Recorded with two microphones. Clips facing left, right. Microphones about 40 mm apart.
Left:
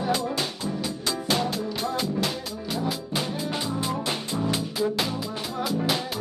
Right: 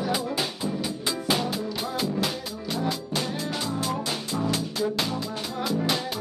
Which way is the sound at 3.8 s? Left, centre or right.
Left.